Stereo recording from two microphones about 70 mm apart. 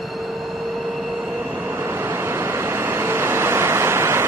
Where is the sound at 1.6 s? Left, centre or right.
Right.